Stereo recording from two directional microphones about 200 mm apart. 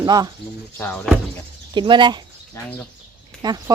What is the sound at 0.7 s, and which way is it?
Speech, 5° left (ahead or behind).